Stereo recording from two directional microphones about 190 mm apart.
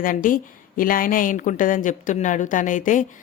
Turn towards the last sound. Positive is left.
turn(degrees=45)  # may be behind; listen again after turning